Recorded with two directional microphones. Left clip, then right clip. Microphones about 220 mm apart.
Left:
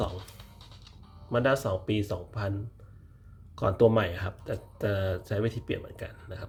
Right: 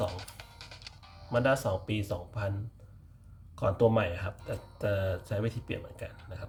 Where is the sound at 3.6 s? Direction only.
20° left (ahead or behind).